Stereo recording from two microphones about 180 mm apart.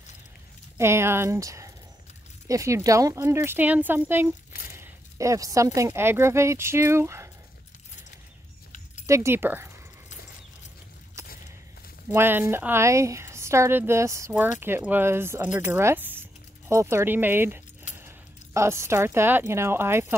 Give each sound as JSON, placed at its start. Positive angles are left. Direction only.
{"t": 0.7, "sound": "speech", "side_deg": -15}
{"t": 9.0, "sound": "speech", "side_deg": -15}
{"t": 11.2, "sound": "a sound", "side_deg": -15}
{"t": 12.1, "sound": "speech", "side_deg": -10}